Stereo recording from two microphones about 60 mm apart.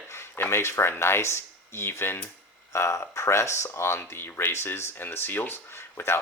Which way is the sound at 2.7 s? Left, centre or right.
Left.